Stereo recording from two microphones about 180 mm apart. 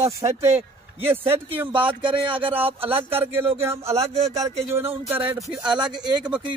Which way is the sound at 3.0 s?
10° right (ahead or behind).